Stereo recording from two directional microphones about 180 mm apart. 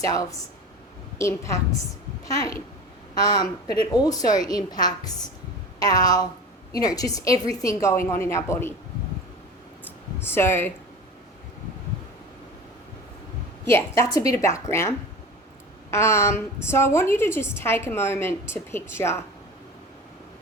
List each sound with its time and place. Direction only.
0.1 s a woman's voice: 20° left (ahead or behind)
3.2 s a woman's voice: 20° left (ahead or behind)
10.2 s a woman's voice: 15° left (ahead or behind)
13.7 s a woman's voice: 15° left (ahead or behind)